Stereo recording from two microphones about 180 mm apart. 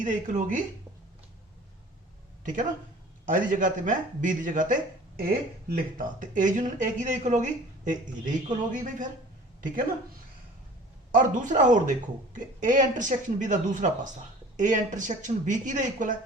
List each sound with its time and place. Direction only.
0.0 s speech: 45° right (ahead or behind)
2.4 s speech: 45° right (ahead or behind)
11.1 s speech: 45° right (ahead or behind)